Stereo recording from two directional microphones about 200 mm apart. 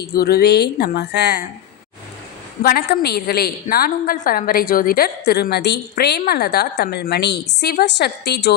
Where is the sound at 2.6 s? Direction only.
50° left (ahead or behind).